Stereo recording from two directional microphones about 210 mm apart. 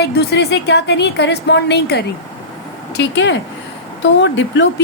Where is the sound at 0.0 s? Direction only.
50° left (ahead or behind).